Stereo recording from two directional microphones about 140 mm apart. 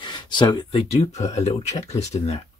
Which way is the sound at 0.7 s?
50° left (ahead or behind).